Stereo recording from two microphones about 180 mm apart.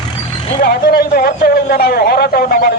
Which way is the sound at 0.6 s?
60° left (ahead or behind).